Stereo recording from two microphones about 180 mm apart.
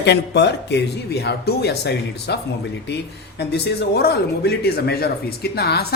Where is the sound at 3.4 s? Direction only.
65° left (ahead or behind).